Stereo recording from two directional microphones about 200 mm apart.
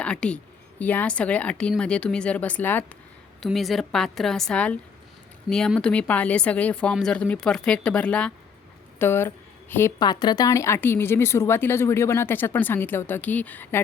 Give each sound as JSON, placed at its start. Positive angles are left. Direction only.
{"t": 0.0, "sound": "a woman's voice", "side_deg": 5}